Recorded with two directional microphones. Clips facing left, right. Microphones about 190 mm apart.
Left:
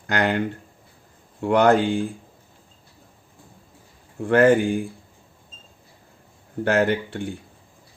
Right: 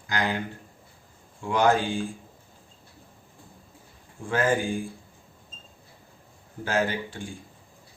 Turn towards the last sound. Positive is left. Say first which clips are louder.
# left 7 dB
turn(degrees=65)  # may be behind; listen again after turning